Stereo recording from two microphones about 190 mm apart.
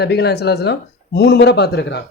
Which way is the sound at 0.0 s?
60° left (ahead or behind).